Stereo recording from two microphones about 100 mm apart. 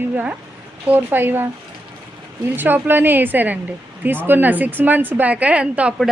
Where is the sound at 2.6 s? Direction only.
20° right (ahead or behind).